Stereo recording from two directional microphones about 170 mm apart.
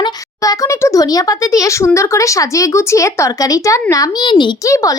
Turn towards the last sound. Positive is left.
turn(degrees=20)  # may be behind; listen again after turning